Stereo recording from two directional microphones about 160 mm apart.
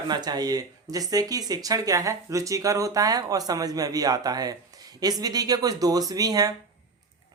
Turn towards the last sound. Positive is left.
turn(degrees=-25)  # may be behind; listen again after turning